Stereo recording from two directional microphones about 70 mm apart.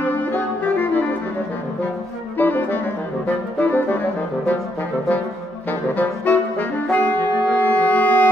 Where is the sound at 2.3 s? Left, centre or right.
Left.